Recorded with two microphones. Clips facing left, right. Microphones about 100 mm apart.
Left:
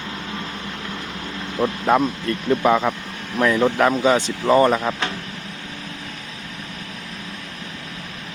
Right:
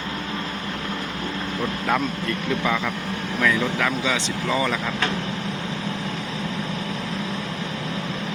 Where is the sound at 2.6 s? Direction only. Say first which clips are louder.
Left 6 dB; 40° left (ahead or behind).